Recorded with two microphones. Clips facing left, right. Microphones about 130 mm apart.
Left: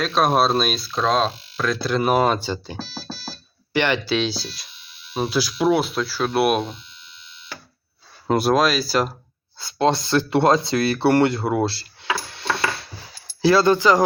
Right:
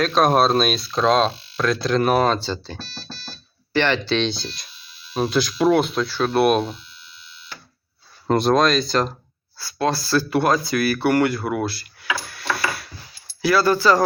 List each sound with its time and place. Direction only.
0.0 s speech: centre (ahead or behind)
8.3 s speech: 5° left (ahead or behind)
9.6 s speech: 20° left (ahead or behind)
12.3 s ping: 25° left (ahead or behind)
13.4 s speech: 25° left (ahead or behind)